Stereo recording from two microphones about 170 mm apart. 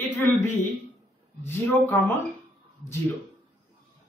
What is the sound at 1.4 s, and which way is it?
Speech, 15° left (ahead or behind).